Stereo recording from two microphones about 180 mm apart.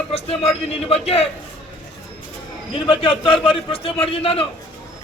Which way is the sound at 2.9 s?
30° left (ahead or behind).